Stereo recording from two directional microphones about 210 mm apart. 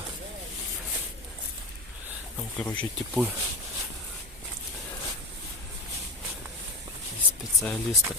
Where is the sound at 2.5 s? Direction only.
5° left (ahead or behind).